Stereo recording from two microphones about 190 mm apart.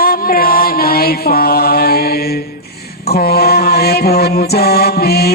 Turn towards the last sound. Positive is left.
turn(degrees=55)  # may be behind; listen again after turning